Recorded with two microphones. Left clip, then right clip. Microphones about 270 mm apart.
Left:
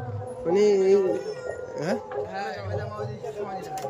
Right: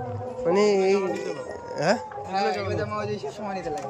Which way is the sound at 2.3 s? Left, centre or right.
Right.